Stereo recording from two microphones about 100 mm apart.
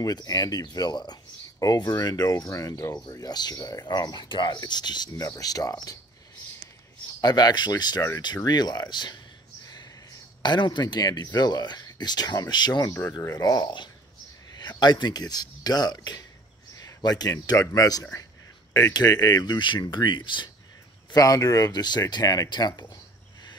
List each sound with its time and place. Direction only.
0.0 s speech: 40° left (ahead or behind)
7.2 s speech: 45° left (ahead or behind)
10.4 s speech: 50° left (ahead or behind)
12.8 s speech: 25° left (ahead or behind)
13.4 s speech: 45° left (ahead or behind)
21.1 s speech: 35° left (ahead or behind)